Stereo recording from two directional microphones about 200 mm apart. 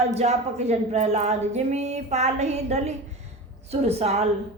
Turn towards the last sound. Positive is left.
turn(degrees=-30)  # may be behind; listen again after turning